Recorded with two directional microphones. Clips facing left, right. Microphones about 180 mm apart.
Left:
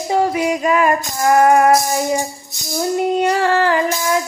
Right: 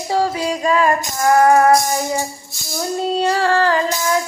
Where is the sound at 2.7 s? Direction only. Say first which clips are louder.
Left 3 dB; 15° left (ahead or behind).